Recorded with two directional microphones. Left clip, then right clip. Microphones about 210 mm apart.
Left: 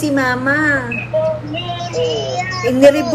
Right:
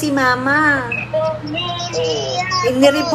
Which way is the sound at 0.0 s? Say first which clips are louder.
Even; 30° right (ahead or behind).